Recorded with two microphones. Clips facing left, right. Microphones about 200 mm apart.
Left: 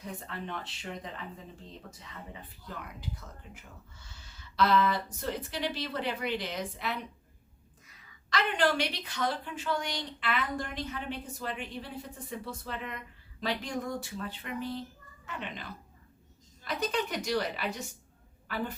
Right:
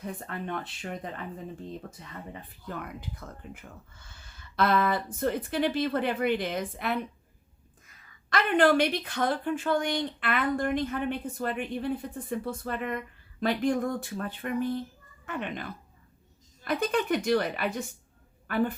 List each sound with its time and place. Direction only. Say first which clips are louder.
0.0 s speech: right 4 dB; 50° right (ahead or behind)
2.6 s speech: right 5 dB; 55° right (ahead or behind)
8.3 s speech: right 6 dB; 55° right (ahead or behind)
16.6 s a woman's voice: right 5 dB; 55° right (ahead or behind)